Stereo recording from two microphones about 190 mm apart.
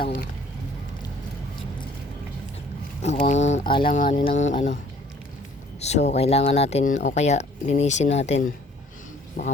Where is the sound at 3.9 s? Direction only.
40° left (ahead or behind).